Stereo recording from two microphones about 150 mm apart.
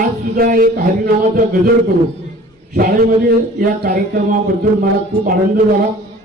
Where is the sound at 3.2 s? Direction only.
75° right (ahead or behind).